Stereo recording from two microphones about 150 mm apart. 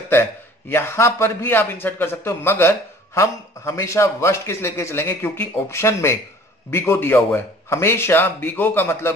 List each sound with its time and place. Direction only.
0.7 s a man's voice: 15° left (ahead or behind)